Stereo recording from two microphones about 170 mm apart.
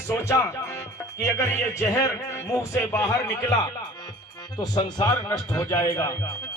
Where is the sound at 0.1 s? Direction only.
15° left (ahead or behind).